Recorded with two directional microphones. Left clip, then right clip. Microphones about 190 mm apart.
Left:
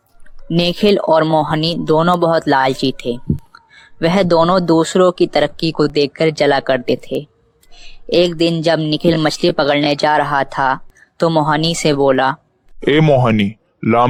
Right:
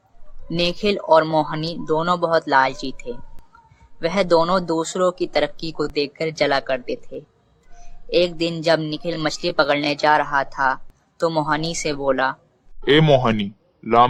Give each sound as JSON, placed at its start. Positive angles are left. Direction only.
{"t": 0.5, "sound": "speech", "side_deg": 35}
{"t": 3.5, "sound": "a sound", "side_deg": 30}
{"t": 4.0, "sound": "speech", "side_deg": 35}
{"t": 12.8, "sound": "speech", "side_deg": 50}